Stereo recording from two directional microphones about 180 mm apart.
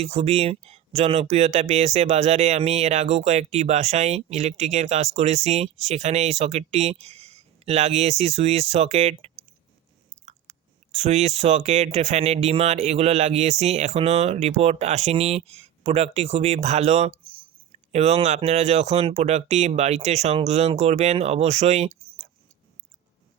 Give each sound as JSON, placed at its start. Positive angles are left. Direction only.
{"t": 0.0, "sound": "speech", "side_deg": -35}
{"t": 10.9, "sound": "speech", "side_deg": -40}